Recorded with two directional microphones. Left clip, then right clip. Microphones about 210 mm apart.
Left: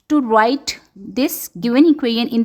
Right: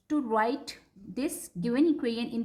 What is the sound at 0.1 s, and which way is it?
A woman's voice, 40° left (ahead or behind).